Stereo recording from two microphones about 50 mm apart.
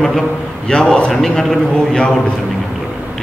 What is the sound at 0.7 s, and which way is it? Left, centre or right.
A man's voice, centre.